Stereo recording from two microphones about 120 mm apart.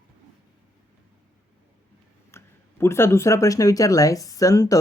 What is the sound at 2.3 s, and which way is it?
Speech, 20° left (ahead or behind).